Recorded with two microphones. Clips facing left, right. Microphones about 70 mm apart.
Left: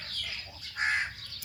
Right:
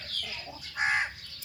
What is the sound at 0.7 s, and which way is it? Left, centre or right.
Crow, centre.